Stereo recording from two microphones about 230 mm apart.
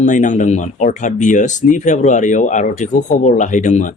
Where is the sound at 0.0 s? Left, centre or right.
Left.